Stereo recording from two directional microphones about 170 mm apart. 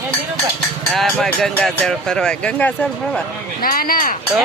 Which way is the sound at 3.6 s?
60° left (ahead or behind).